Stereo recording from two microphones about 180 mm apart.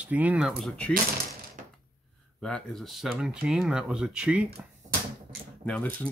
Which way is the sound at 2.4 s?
Centre (ahead or behind).